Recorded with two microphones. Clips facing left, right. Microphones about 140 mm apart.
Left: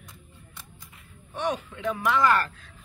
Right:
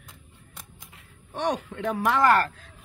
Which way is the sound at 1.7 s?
55° right (ahead or behind).